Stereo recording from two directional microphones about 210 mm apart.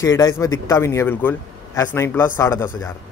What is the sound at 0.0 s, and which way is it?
Speech, 15° left (ahead or behind).